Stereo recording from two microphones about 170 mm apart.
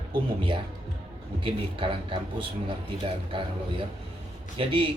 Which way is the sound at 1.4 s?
30° right (ahead or behind).